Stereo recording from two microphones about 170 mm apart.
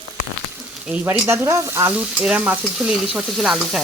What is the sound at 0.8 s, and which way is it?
Stir, 10° right (ahead or behind).